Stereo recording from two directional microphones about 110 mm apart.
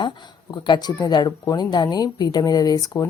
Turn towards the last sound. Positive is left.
turn(degrees=35)  # may be behind; listen again after turning